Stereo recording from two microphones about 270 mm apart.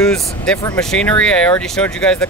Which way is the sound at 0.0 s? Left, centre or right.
Centre.